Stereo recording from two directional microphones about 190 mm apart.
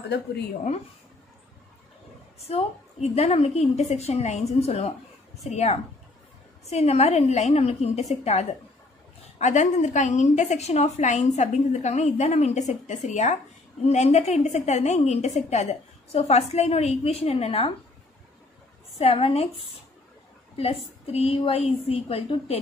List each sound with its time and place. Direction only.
2.4 s a woman's voice: 35° left (ahead or behind)
18.9 s a woman's voice: 30° left (ahead or behind)
20.5 s a woman's voice: 30° left (ahead or behind)